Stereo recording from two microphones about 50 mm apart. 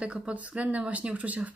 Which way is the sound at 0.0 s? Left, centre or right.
Right.